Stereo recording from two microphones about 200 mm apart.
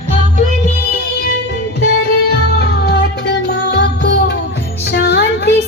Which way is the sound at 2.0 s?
55° left (ahead or behind).